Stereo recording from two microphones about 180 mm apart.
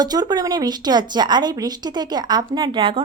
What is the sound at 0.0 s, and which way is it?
A woman's voice, 20° right (ahead or behind).